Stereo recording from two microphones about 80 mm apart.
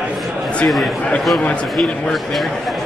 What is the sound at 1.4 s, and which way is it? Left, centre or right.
Speech, centre.